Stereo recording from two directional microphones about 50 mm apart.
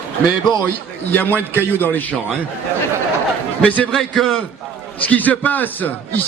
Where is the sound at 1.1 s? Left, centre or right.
Left.